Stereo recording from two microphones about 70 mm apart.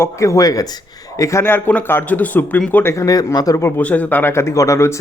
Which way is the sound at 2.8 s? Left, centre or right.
Left.